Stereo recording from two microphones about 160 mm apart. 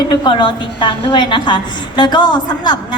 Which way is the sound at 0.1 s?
30° left (ahead or behind).